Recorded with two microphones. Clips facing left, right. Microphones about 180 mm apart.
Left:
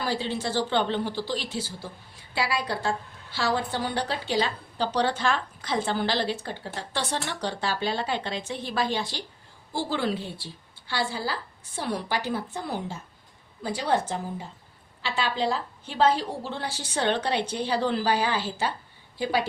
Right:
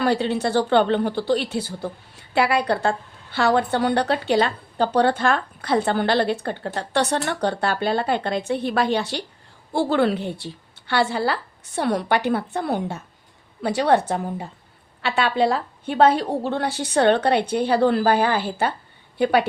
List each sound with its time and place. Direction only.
0.0 s a woman's voice: 65° right (ahead or behind)